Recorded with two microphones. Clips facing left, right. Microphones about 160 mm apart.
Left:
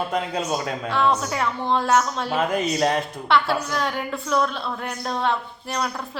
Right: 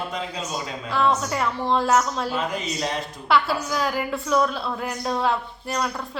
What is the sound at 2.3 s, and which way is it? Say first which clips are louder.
Speech: left 5 dB; 55° left (ahead or behind).